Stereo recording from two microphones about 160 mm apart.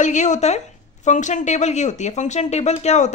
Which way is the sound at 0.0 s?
50° left (ahead or behind).